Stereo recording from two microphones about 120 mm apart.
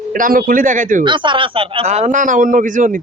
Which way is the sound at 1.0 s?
40° right (ahead or behind).